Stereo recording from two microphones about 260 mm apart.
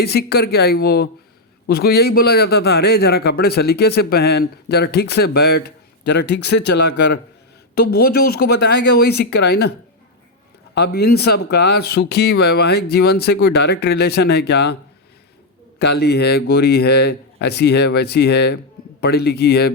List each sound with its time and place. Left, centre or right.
0.0 s a man's voice: left
10.8 s a man's voice: left
15.8 s a man's voice: left